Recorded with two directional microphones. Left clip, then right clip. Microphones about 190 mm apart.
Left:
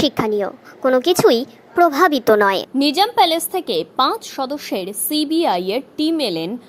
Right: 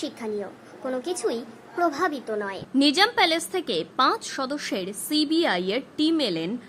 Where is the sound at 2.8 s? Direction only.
15° left (ahead or behind).